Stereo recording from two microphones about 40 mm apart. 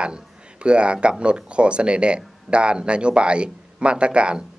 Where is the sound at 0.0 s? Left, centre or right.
Right.